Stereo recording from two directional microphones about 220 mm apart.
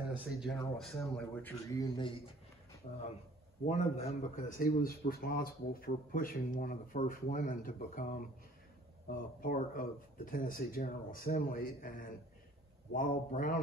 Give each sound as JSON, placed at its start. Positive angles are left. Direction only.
{"t": 0.7, "sound": "speech", "side_deg": 0}
{"t": 2.8, "sound": "a man's voice", "side_deg": 30}